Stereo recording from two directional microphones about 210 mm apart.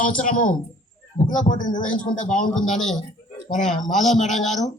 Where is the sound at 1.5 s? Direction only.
40° left (ahead or behind).